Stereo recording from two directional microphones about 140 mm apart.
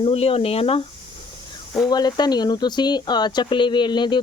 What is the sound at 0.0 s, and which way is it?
Speech, 45° left (ahead or behind).